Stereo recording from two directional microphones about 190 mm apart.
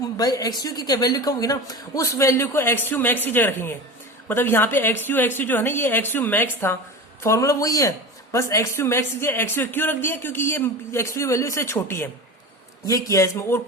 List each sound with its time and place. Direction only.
0.0 s a man's voice: 20° left (ahead or behind)